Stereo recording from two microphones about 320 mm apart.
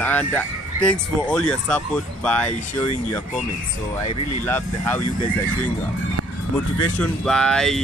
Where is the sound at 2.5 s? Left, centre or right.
Left.